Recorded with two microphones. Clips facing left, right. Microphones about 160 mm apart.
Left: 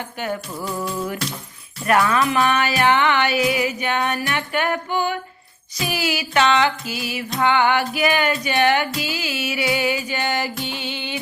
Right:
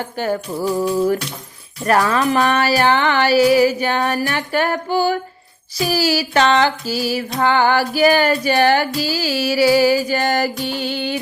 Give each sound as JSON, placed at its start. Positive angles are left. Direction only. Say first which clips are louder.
{"t": 0.0, "sound": "music", "louder": "right 5 dB", "side_deg": -35}